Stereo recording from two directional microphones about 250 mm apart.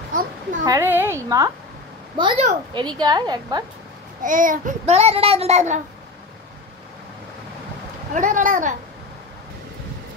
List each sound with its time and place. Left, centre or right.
0.1 s a child's voice: right
0.7 s a woman's voice: centre
4.2 s a child's voice: right
8.1 s speech: right